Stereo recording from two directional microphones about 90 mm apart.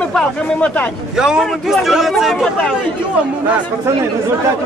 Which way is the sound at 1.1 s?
5° right (ahead or behind).